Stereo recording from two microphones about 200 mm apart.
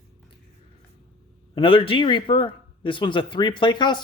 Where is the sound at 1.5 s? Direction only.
25° left (ahead or behind).